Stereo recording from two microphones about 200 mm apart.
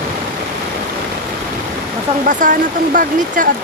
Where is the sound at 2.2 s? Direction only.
40° right (ahead or behind).